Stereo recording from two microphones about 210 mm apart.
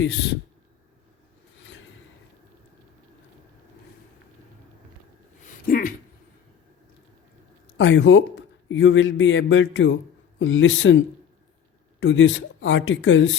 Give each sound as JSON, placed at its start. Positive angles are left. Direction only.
{"t": 0.0, "sound": "speech", "side_deg": 55}
{"t": 5.5, "sound": "a sound", "side_deg": 40}
{"t": 7.8, "sound": "a man's voice", "side_deg": 65}